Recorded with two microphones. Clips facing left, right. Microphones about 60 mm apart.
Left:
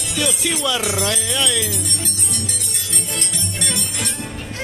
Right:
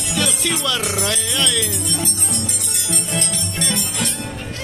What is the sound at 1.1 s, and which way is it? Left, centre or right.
Speech, centre.